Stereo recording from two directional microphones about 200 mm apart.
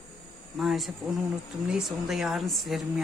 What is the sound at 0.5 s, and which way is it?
A woman's voice, centre (ahead or behind).